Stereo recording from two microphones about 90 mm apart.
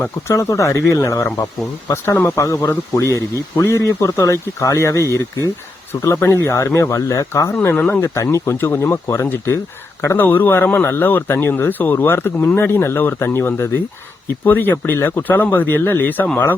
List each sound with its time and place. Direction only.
0.0 s speech: 35° left (ahead or behind)
2.3 s speech: 35° left (ahead or behind)
7.6 s speech: 20° left (ahead or behind)
8.0 s speech: 30° left (ahead or behind)